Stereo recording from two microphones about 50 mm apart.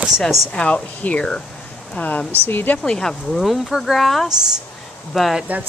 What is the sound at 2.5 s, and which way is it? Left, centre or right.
Speech, left.